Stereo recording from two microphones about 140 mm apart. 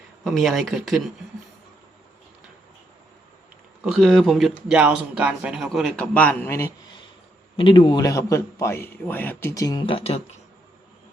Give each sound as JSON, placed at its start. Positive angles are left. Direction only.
{"t": 0.3, "sound": "speech", "side_deg": 0}
{"t": 3.8, "sound": "speech", "side_deg": 0}
{"t": 6.1, "sound": "a man's voice", "side_deg": 10}
{"t": 7.5, "sound": "a man's voice", "side_deg": 40}